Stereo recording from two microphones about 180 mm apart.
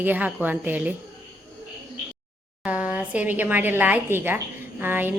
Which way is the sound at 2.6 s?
5° right (ahead or behind).